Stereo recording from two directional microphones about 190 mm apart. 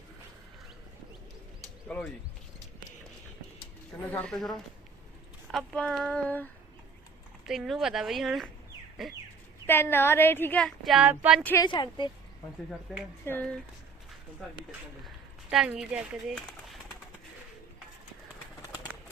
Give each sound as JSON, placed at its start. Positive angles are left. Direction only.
{"t": 1.9, "sound": "speech", "side_deg": 5}
{"t": 4.1, "sound": "speech", "side_deg": 5}
{"t": 7.4, "sound": "speech", "side_deg": 0}
{"t": 9.6, "sound": "speech", "side_deg": 10}
{"t": 11.5, "sound": "speech", "side_deg": 25}
{"t": 13.2, "sound": "speech", "side_deg": 10}
{"t": 14.7, "sound": "speech", "side_deg": -5}